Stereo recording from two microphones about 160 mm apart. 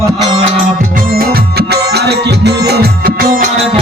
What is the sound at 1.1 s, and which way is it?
Music, 70° right (ahead or behind).